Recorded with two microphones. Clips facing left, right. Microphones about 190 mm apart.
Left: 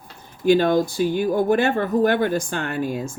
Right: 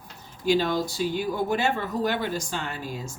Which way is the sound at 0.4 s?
55° left (ahead or behind).